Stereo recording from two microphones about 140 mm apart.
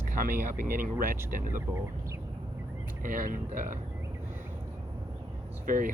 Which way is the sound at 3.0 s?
75° right (ahead or behind).